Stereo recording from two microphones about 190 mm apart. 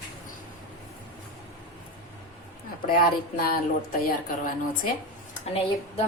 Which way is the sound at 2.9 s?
50° left (ahead or behind).